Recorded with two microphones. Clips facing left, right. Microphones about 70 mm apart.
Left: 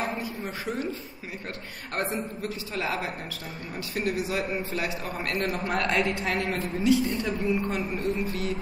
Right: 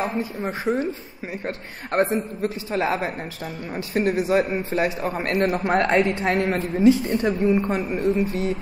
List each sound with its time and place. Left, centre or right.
0.0 s a man's voice: right
1.9 s a man's voice: right